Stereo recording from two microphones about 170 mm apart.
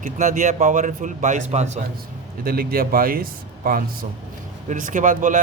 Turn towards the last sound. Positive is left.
turn(degrees=-45)  # may be behind; listen again after turning